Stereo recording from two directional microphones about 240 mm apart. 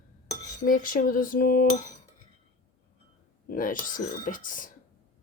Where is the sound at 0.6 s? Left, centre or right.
Left.